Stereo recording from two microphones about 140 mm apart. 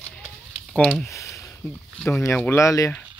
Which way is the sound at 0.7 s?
5° left (ahead or behind).